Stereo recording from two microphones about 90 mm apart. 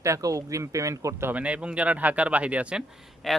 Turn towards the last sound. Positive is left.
turn(degrees=0)  # may be behind; listen again after turning